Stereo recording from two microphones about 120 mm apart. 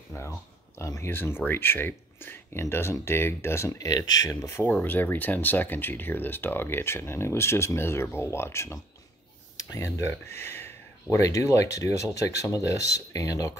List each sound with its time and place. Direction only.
0.1 s speech: 20° left (ahead or behind)